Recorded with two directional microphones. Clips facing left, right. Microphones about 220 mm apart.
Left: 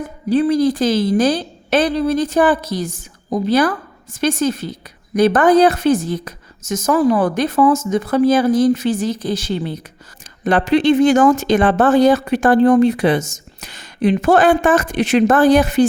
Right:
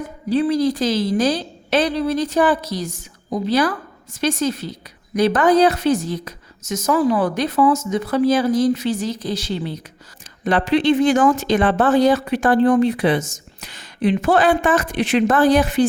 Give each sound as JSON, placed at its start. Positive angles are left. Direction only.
{"t": 0.3, "sound": "speech", "side_deg": 50}